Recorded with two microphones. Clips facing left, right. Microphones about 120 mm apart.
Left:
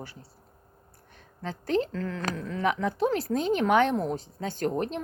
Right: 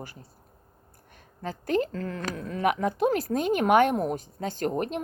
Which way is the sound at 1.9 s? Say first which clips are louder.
Left 1 dB; 40° right (ahead or behind).